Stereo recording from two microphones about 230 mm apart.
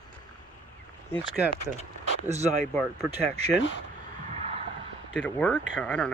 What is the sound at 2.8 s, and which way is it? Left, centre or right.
Speech, centre.